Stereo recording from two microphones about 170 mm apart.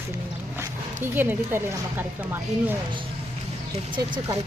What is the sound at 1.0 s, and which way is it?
Speech, 10° right (ahead or behind).